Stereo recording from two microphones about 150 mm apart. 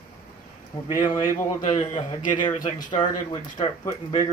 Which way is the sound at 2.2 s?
60° left (ahead or behind).